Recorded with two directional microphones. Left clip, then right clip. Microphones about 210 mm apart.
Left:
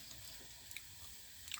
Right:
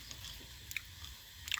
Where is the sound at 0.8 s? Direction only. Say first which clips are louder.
Right 10 dB; 5° left (ahead or behind).